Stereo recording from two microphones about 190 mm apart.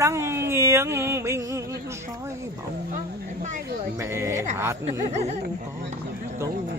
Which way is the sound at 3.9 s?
15° right (ahead or behind).